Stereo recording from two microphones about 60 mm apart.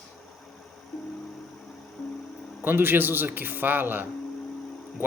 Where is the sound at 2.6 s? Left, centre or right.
Right.